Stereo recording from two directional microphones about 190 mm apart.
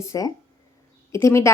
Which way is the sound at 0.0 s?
15° left (ahead or behind).